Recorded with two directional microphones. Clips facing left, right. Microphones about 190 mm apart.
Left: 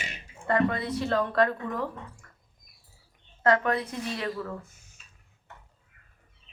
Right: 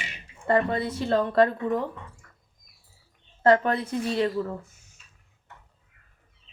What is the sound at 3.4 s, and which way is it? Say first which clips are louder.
Speech: right 4 dB; 30° right (ahead or behind).